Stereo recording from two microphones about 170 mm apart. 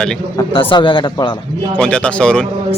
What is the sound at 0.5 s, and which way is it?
Speech, 30° left (ahead or behind).